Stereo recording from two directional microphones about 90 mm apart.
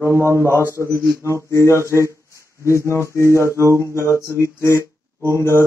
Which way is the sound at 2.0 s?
35° left (ahead or behind).